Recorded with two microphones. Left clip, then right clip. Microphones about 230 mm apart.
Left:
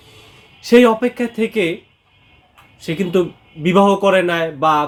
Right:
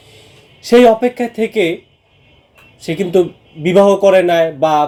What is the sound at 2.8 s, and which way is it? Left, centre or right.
Speech, centre.